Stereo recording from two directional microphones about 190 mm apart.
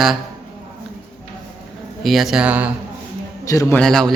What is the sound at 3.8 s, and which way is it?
Speech, centre (ahead or behind).